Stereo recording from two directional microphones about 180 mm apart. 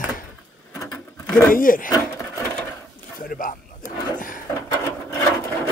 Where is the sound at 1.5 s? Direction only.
50° left (ahead or behind).